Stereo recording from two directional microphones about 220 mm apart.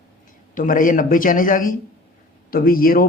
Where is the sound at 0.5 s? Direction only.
40° left (ahead or behind).